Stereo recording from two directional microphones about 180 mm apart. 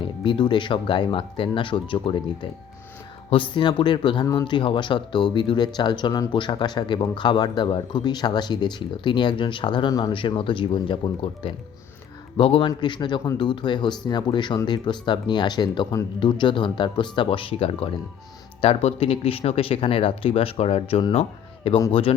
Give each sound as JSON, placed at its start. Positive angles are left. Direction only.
{"t": 0.0, "sound": "speech", "side_deg": 25}